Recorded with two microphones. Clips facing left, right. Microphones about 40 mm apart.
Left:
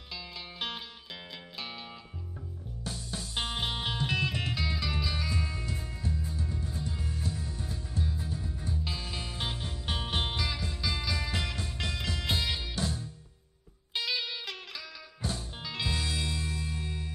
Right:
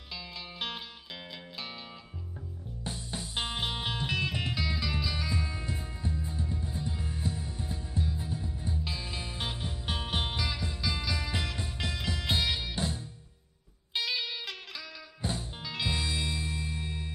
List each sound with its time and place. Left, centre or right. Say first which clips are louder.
0.1 s music: even; centre
2.8 s music: even; right
3.3 s music: even; centre
5.5 s music: even; centre
9.0 s music: even; centre
12.7 s music: even; right
13.9 s music: even; centre
15.2 s music: right 1 dB; right
15.6 s music: even; centre
15.9 s music: right 1 dB; centre